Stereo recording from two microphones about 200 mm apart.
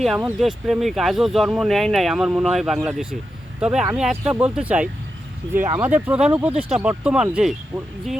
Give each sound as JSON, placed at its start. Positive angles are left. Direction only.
{"t": 0.0, "sound": "speech", "side_deg": -5}